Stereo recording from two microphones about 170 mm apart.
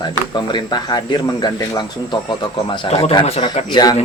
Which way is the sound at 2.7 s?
35° left (ahead or behind).